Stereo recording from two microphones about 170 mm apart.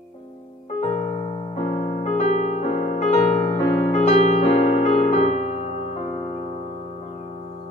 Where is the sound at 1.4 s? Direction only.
30° left (ahead or behind).